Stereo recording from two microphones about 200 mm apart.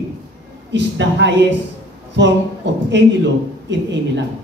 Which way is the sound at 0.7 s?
60° right (ahead or behind).